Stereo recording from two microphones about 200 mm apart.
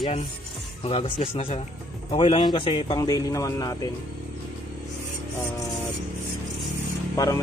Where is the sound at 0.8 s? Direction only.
30° left (ahead or behind).